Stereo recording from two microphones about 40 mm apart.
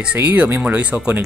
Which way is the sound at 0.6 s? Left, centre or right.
Right.